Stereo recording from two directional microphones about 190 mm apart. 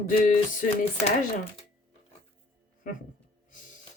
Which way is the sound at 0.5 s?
45° left (ahead or behind).